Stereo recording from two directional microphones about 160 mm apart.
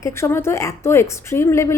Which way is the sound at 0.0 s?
15° left (ahead or behind).